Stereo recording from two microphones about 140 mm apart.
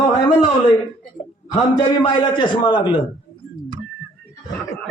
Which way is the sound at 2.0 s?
35° left (ahead or behind).